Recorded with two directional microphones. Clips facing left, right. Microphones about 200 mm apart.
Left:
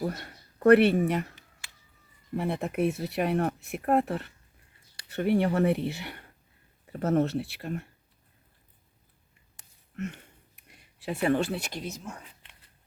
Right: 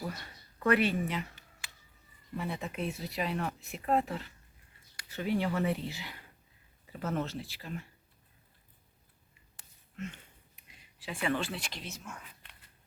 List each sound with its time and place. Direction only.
0.0 s speech: 50° left (ahead or behind)
2.3 s speech: 55° left (ahead or behind)
6.9 s speech: 50° left (ahead or behind)
7.3 s speech: 65° left (ahead or behind)
9.9 s a sound: 55° left (ahead or behind)
11.1 s speech: 40° left (ahead or behind)